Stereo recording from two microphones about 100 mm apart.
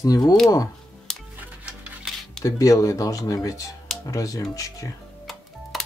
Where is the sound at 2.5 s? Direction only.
35° left (ahead or behind).